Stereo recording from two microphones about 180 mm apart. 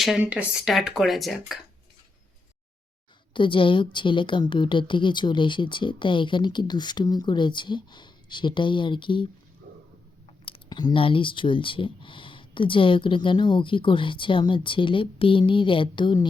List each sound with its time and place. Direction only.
0.0 s speech: 5° right (ahead or behind)
3.3 s speech: 30° left (ahead or behind)
10.4 s speech: 30° left (ahead or behind)